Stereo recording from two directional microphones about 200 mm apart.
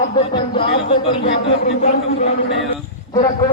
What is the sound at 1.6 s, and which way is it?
Speech, 35° left (ahead or behind).